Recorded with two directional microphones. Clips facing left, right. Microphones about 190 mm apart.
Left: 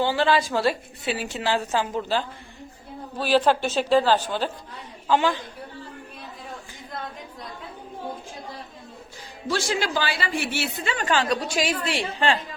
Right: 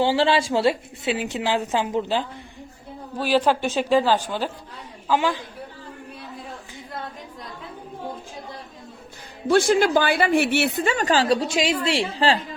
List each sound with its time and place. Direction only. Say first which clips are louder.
0.0 s a woman's voice: right 2 dB; 30° right (ahead or behind); by 5.4 s 10° right (ahead or behind)
9.5 s a woman's voice: right 8 dB; 55° right (ahead or behind); by 12.4 s 35° right (ahead or behind)